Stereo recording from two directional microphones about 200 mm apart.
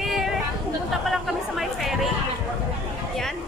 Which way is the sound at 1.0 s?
Centre (ahead or behind).